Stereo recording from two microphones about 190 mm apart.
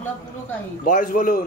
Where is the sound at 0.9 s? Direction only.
45° left (ahead or behind).